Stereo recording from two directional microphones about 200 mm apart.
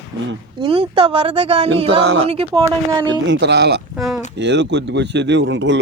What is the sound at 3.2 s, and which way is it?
Speech, 60° right (ahead or behind).